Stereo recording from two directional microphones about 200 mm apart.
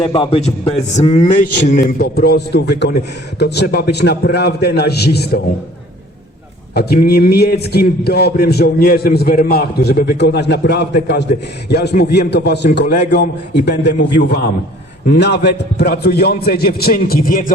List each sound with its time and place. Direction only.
0.0 s a man's voice: 25° left (ahead or behind)
1.6 s a man's voice: 50° left (ahead or behind)
6.7 s a man's voice: 50° left (ahead or behind)